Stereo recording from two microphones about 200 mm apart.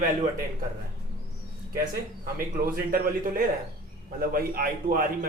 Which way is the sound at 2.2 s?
45° right (ahead or behind).